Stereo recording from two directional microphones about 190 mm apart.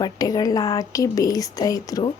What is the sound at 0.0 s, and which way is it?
Speech, 20° left (ahead or behind).